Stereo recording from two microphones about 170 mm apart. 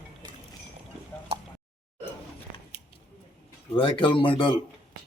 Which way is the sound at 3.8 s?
30° left (ahead or behind).